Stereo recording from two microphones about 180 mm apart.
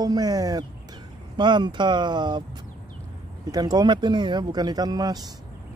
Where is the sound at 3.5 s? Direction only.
20° right (ahead or behind).